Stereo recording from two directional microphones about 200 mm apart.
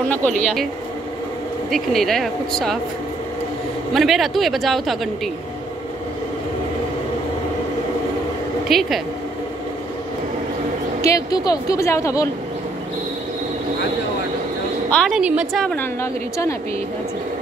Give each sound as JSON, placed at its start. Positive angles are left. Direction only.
{"t": 1.7, "sound": "a woman's voice", "side_deg": 0}
{"t": 3.9, "sound": "a woman's voice", "side_deg": 0}
{"t": 8.6, "sound": "a woman's voice", "side_deg": 0}
{"t": 11.0, "sound": "speech", "side_deg": 15}
{"t": 14.9, "sound": "a woman's voice", "side_deg": 0}